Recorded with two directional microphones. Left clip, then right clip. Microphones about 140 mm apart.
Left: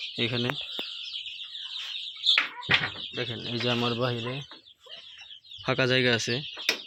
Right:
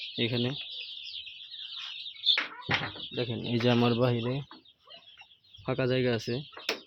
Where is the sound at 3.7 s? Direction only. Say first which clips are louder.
Right 1 dB; 45° right (ahead or behind).